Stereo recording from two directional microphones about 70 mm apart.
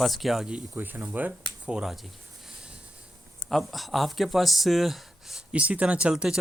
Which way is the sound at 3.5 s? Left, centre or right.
Centre.